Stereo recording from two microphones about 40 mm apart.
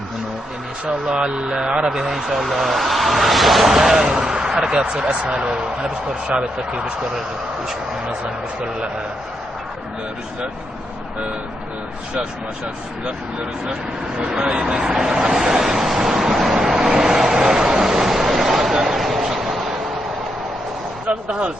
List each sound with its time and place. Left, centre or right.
0.9 s speech: right
1.9 s speech: centre
3.7 s speech: centre
4.1 s a sound: centre
4.8 s speech: right
14.3 s speech: right
15.4 s vehicle: centre
18.9 s a sound: centre